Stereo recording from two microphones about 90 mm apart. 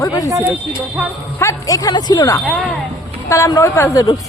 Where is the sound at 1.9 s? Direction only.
55° left (ahead or behind).